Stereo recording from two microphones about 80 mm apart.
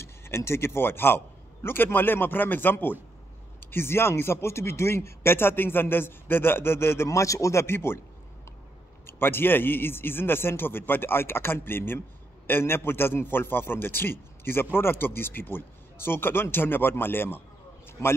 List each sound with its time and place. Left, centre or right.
0.0 s a man's voice: left
9.0 s a man's voice: left